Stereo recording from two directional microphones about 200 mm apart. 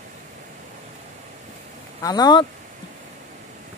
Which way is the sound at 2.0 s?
20° left (ahead or behind).